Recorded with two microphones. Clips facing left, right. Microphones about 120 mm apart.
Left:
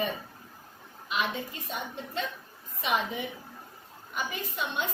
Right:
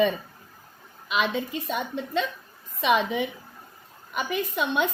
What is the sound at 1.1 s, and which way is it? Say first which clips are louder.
A woman's voice: right 6 dB; 90° right.